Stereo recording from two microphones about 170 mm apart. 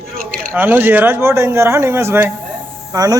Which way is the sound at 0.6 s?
10° right (ahead or behind).